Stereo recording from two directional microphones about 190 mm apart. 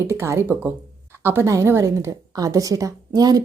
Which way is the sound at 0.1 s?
15° right (ahead or behind).